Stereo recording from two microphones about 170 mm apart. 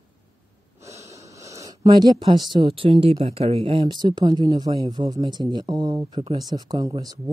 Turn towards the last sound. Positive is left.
turn(degrees=-20)  # may be behind; listen again after turning